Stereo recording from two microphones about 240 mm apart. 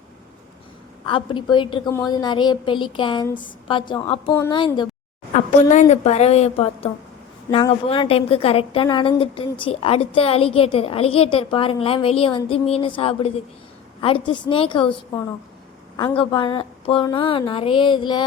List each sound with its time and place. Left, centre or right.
1.0 s a woman's voice: left
5.3 s a woman's voice: left